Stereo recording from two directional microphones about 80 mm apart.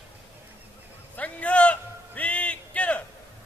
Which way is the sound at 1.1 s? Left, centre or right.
Centre.